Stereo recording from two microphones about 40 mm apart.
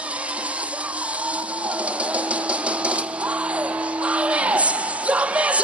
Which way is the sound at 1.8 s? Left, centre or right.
Right.